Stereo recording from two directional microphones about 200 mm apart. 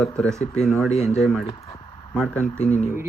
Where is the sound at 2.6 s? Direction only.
35° left (ahead or behind).